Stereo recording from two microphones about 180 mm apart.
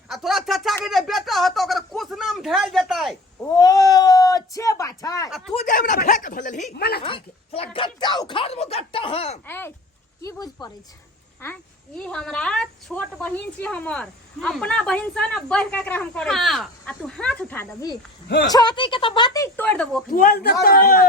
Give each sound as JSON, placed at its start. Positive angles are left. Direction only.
{"t": 0.1, "sound": "a sound", "side_deg": 0}
{"t": 3.5, "sound": "a sound", "side_deg": 20}
{"t": 5.5, "sound": "speech", "side_deg": 45}
{"t": 6.7, "sound": "a man's voice", "side_deg": 60}
{"t": 7.0, "sound": "speech", "side_deg": 30}
{"t": 9.5, "sound": "a woman's voice", "side_deg": 10}
{"t": 20.1, "sound": "a man's voice", "side_deg": 50}